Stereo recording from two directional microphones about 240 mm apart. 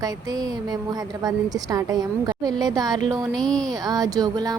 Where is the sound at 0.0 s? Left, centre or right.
Centre.